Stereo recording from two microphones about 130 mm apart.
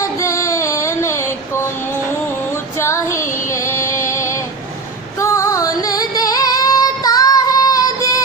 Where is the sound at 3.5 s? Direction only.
25° left (ahead or behind).